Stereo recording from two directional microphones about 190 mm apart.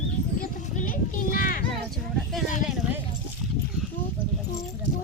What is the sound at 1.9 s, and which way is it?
Speech, centre (ahead or behind).